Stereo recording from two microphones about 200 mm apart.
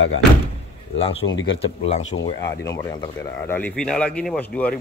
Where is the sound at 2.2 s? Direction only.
15° left (ahead or behind).